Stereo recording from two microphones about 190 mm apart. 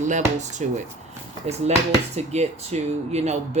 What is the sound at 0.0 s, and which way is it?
Speech, 40° right (ahead or behind).